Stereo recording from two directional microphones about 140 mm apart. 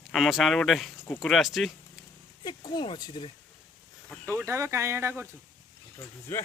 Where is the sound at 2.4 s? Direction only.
35° left (ahead or behind).